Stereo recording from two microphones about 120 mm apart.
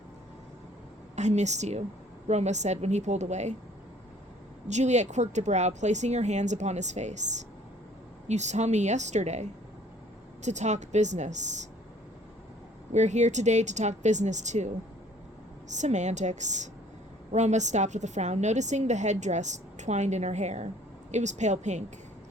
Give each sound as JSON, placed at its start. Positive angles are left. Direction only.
{"t": 1.1, "sound": "a woman's voice", "side_deg": -75}
{"t": 4.7, "sound": "a woman's voice", "side_deg": -75}
{"t": 12.9, "sound": "a woman's voice", "side_deg": -75}
{"t": 15.7, "sound": "a woman's voice", "side_deg": -80}